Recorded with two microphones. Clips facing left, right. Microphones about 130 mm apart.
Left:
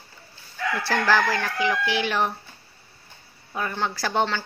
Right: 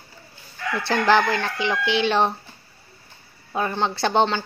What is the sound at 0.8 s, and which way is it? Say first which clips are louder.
Speech: right 4 dB; 20° right (ahead or behind).